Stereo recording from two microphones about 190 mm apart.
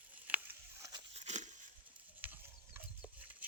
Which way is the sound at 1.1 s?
35° right (ahead or behind).